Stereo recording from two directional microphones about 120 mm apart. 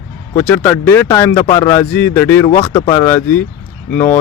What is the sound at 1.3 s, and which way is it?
Speech, 50° left (ahead or behind).